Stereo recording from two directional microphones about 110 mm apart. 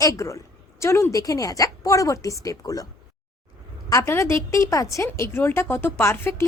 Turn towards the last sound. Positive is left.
turn(degrees=20)  # may be behind; listen again after turning